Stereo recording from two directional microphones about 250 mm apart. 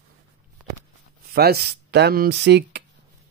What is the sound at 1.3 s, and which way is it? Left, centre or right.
Speech, right.